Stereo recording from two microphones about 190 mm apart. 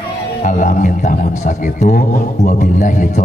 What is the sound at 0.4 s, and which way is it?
A man's voice, 40° left (ahead or behind).